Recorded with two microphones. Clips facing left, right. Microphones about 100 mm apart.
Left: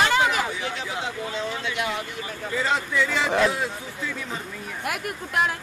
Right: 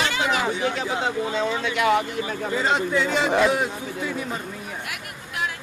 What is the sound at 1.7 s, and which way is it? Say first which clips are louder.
Speech: right 11 dB; 85° right.